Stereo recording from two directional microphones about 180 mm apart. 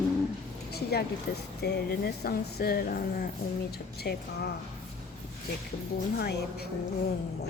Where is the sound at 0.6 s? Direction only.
60° left (ahead or behind).